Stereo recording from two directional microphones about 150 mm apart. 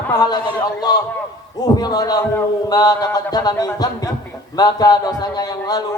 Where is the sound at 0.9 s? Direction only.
25° left (ahead or behind).